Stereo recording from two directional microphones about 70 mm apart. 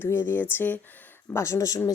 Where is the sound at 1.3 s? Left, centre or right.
Left.